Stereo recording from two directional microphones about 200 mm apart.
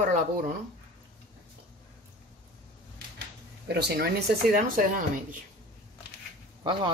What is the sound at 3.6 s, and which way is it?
Speech, 55° right (ahead or behind).